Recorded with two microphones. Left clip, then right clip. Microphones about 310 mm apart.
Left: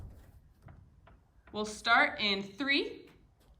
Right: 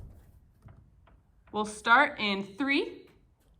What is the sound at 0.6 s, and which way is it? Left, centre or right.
Tick-tock, left.